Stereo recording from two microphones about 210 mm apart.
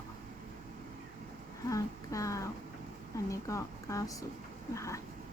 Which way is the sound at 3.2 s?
15° left (ahead or behind).